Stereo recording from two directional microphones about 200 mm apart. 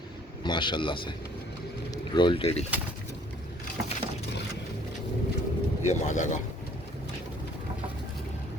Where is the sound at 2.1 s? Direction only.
25° left (ahead or behind).